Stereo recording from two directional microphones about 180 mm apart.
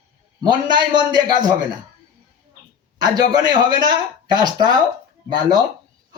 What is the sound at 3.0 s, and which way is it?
A man's voice, 25° right (ahead or behind).